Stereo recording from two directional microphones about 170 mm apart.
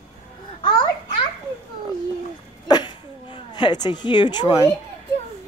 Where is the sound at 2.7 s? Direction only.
25° left (ahead or behind).